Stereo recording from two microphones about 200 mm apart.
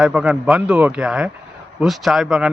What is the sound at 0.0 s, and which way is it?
Speech, 5° right (ahead or behind).